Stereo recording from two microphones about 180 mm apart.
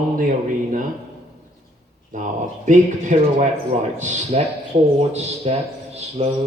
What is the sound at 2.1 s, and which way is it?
Speech, 45° right (ahead or behind).